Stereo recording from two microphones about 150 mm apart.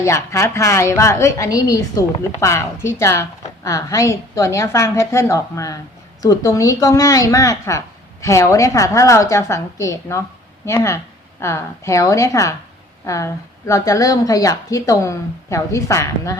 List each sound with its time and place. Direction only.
0.0 s a woman's voice: 20° left (ahead or behind)